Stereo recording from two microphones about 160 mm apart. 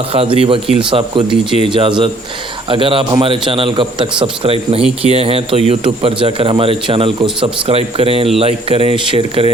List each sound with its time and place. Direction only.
0.1 s a man's voice: 35° right (ahead or behind)